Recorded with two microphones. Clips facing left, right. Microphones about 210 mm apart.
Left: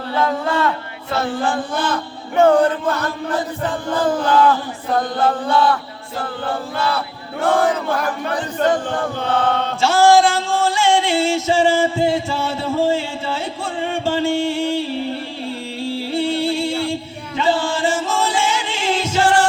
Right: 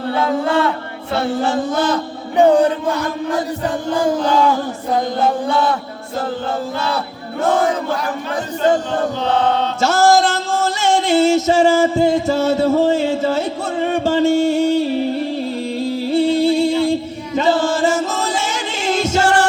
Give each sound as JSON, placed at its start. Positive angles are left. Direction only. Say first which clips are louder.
{"t": 2.3, "sound": "chant", "louder": "right 1 dB", "side_deg": -15}
{"t": 9.2, "sound": "chant", "louder": "right 1 dB", "side_deg": 55}
{"t": 9.8, "sound": "music", "louder": "left 1 dB", "side_deg": -40}